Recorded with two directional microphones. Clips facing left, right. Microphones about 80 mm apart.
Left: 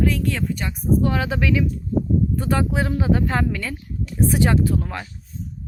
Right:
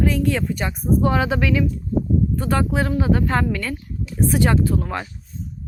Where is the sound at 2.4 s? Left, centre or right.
Centre.